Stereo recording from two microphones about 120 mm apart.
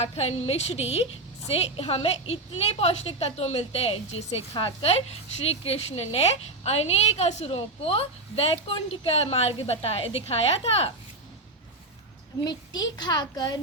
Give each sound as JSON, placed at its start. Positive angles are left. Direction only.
{"t": 0.0, "sound": "a woman's voice", "side_deg": 60}
{"t": 12.5, "sound": "a child's voice", "side_deg": 35}